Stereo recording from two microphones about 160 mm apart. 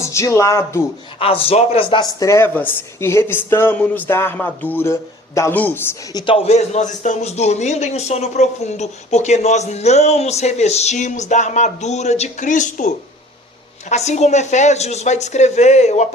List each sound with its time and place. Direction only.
0.0 s speech: 15° left (ahead or behind)
1.2 s speech: 35° left (ahead or behind); by 5.9 s 10° left (ahead or behind)
6.1 s a man's voice: 35° left (ahead or behind); by 12.9 s 50° left (ahead or behind)
13.9 s a man's voice: 45° left (ahead or behind)